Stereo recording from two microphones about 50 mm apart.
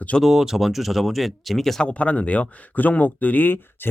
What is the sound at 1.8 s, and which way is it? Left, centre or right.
Speech, left.